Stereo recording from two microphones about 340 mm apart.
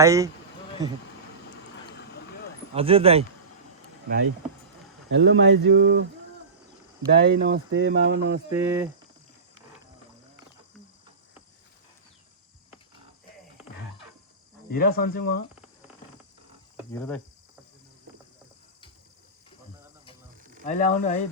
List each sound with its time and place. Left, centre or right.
0.0 s speech: centre
1.7 s vehicle: left
2.7 s speech: centre
5.1 s a sound: right
7.1 s speech: right
8.4 s speech: centre
14.7 s cricket: left
16.9 s speech: centre
20.7 s cricket: left